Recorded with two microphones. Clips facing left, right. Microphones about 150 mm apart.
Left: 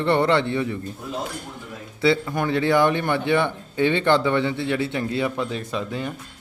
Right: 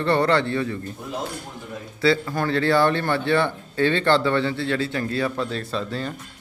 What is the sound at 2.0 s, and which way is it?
A man's voice, 20° left (ahead or behind).